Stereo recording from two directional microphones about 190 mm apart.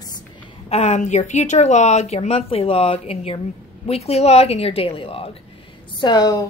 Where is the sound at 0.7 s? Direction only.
35° left (ahead or behind).